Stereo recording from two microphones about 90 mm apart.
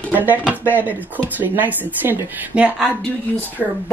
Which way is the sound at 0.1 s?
20° right (ahead or behind).